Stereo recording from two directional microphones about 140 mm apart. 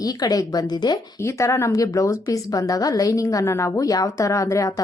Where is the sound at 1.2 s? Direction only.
20° left (ahead or behind).